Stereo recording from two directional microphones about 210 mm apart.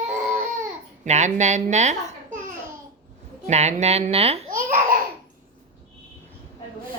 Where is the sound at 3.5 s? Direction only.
30° right (ahead or behind).